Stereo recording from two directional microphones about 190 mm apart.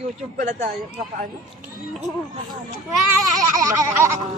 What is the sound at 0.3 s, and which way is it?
Speech, 45° right (ahead or behind).